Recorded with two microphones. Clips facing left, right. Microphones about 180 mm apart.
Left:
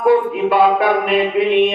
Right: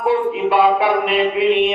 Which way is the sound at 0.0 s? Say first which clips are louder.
Left 3 dB; 45° left (ahead or behind).